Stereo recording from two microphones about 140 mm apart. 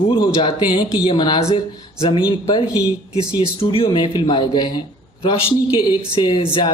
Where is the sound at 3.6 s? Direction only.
40° left (ahead or behind).